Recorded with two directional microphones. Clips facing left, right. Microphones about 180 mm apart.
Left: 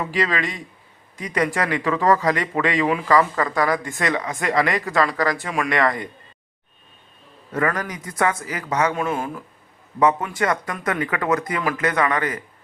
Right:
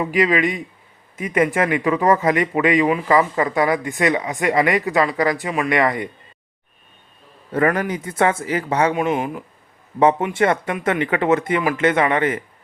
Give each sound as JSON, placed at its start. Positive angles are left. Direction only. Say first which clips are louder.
{"t": 0.0, "sound": "speech", "louder": "right 5 dB", "side_deg": -20}
{"t": 7.5, "sound": "speech", "louder": "right 5 dB", "side_deg": -30}
{"t": 9.0, "sound": "speech", "louder": "right 4 dB", "side_deg": -15}
{"t": 10.0, "sound": "speech", "louder": "right 4 dB", "side_deg": -30}